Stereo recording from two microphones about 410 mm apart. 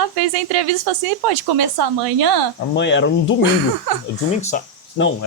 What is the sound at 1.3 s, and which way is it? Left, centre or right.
Speech, right.